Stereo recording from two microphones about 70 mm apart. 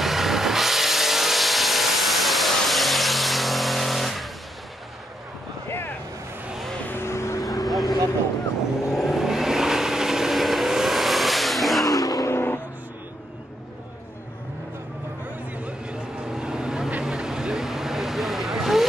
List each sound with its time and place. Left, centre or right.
0.0 s vehicle: centre
5.7 s vehicle: left
7.6 s vehicle: centre
8.9 s vehicle: centre
11.9 s vehicle: left
12.3 s vehicle: left
15.5 s vehicle: centre